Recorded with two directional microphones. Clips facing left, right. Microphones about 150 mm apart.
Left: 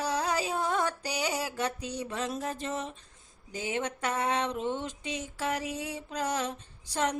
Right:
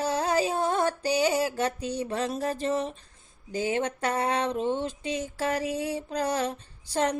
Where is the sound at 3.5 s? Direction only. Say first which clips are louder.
Right 5 dB; 35° right (ahead or behind).